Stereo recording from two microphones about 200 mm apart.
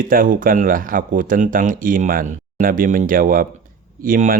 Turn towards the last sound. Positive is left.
turn(degrees=-45)  # may be behind; listen again after turning